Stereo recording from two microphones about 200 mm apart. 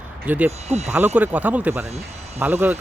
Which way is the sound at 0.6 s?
35° right (ahead or behind).